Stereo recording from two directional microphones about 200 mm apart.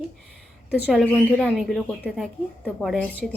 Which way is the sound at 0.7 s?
Centre (ahead or behind).